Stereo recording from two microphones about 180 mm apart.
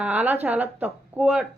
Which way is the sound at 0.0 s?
10° right (ahead or behind).